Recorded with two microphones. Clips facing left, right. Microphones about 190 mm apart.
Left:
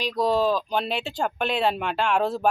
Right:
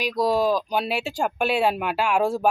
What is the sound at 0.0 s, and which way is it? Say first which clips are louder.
Speech: right 1 dB; 10° right (ahead or behind).